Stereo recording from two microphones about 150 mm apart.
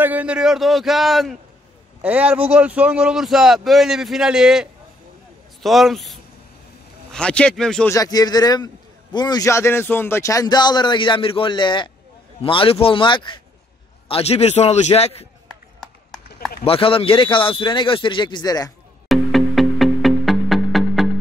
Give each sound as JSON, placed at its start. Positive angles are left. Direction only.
{"t": 0.0, "sound": "a man's voice", "side_deg": -10}
{"t": 7.9, "sound": "a man's voice", "side_deg": 25}
{"t": 16.6, "sound": "a man's voice", "side_deg": 35}
{"t": 19.0, "sound": "music", "side_deg": 0}